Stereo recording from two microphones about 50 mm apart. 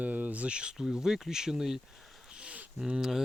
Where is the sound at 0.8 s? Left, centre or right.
Centre.